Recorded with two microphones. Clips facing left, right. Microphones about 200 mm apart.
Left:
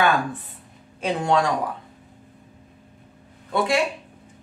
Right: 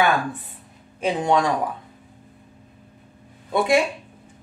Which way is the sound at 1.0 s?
15° right (ahead or behind).